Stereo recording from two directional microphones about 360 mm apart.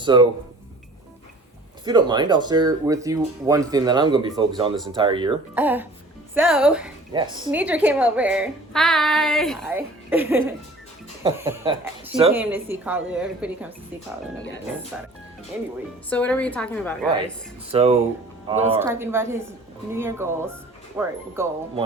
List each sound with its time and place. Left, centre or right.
0.0 s speech: centre
1.8 s a woman's voice: centre
14.9 s a woman's voice: centre
17.7 s speech: centre